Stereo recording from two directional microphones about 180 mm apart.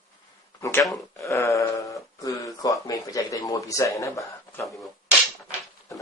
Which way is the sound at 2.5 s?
20° left (ahead or behind).